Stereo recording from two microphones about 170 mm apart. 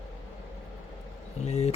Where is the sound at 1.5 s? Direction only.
40° left (ahead or behind).